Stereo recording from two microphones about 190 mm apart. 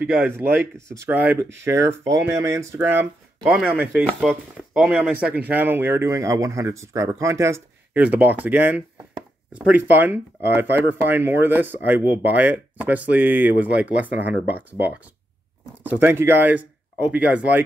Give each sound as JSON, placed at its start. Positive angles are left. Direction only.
{"t": 0.0, "sound": "speech", "side_deg": -10}